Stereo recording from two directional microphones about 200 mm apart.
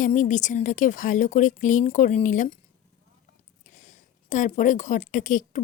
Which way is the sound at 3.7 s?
40° left (ahead or behind).